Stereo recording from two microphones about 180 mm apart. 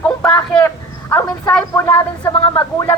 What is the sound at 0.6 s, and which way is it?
A man's voice, 15° left (ahead or behind).